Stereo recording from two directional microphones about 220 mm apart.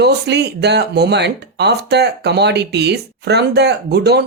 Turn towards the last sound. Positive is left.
turn(degrees=-50)  # may be behind; listen again after turning